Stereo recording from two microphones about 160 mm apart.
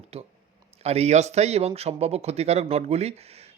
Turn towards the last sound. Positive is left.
turn(degrees=-40)  # may be behind; listen again after turning